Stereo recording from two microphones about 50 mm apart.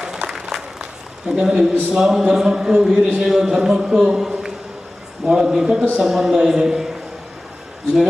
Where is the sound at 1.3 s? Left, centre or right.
Centre.